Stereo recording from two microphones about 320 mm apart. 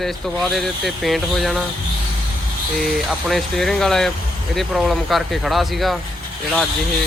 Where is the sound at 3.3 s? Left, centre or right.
Centre.